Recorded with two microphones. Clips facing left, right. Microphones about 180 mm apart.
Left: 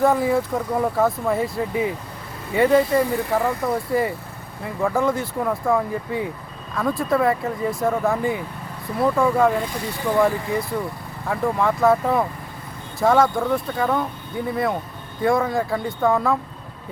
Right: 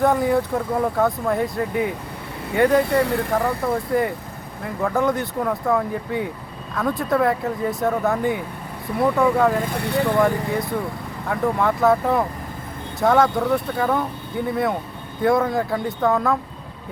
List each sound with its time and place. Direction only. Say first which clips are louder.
0.0 s speech: even; centre (ahead or behind)
2.9 s speech: even; 70° right (ahead or behind)
3.3 s speech: left 1 dB; centre (ahead or behind)
9.7 s speech: right 6 dB; 65° right (ahead or behind)
10.2 s speech: even; centre (ahead or behind)